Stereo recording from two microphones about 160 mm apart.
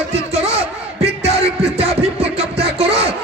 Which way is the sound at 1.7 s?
40° right (ahead or behind).